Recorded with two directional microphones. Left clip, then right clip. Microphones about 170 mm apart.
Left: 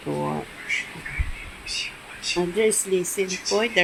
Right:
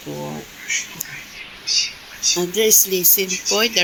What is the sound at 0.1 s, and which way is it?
Speech, 15° left (ahead or behind).